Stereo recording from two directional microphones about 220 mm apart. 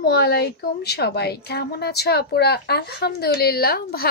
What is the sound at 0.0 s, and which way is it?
A woman's voice, 45° left (ahead or behind).